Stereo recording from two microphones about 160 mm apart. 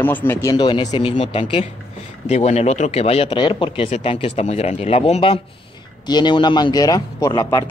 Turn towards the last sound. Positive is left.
turn(degrees=25)  # may be behind; listen again after turning